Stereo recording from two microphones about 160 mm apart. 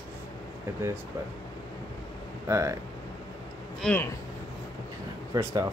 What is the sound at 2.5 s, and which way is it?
Speech, 20° right (ahead or behind).